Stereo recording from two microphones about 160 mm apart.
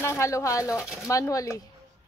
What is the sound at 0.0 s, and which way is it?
Speech, 20° left (ahead or behind).